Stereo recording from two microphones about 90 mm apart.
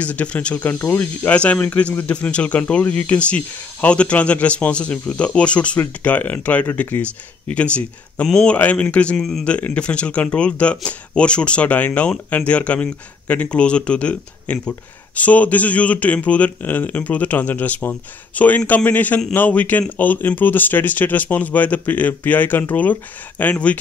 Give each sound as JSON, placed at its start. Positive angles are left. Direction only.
{"t": 0.0, "sound": "a man's voice", "side_deg": 15}